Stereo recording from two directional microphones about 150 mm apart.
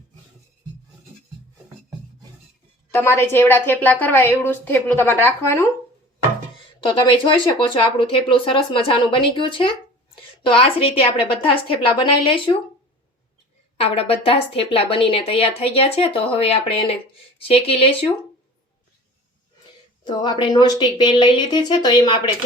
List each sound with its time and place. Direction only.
2.9 s a woman's voice: 15° left (ahead or behind)
6.7 s a woman's voice: 35° left (ahead or behind)
13.7 s a woman's voice: 40° left (ahead or behind)
20.1 s a woman's voice: 30° left (ahead or behind)